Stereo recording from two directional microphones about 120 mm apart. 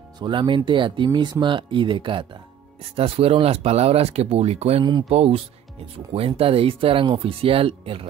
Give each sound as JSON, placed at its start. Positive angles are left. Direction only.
{"t": 0.2, "sound": "speech", "side_deg": -40}
{"t": 3.0, "sound": "speech", "side_deg": -55}